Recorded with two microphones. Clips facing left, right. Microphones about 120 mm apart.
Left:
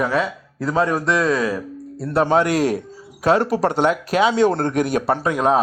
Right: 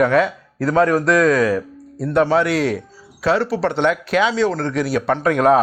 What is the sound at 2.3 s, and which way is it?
Speech, 45° left (ahead or behind).